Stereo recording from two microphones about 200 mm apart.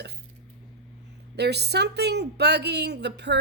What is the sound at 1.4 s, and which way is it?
Speech, 55° right (ahead or behind).